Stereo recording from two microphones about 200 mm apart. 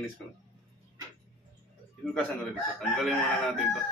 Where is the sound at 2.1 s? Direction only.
Centre (ahead or behind).